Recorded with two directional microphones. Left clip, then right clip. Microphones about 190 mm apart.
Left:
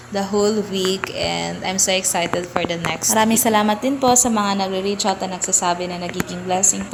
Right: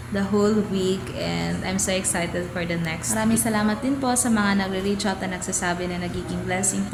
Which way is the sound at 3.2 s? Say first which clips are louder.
Left 8 dB; 40° left (ahead or behind).